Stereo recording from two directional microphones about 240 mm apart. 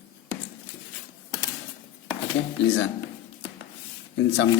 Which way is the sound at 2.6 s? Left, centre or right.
Left.